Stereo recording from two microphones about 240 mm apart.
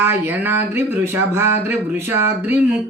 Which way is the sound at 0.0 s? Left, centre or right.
Centre.